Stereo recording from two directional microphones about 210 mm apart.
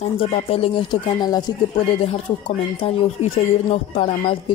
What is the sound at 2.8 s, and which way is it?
Speech, 30° left (ahead or behind).